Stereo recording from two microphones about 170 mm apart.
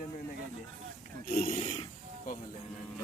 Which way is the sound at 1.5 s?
30° left (ahead or behind).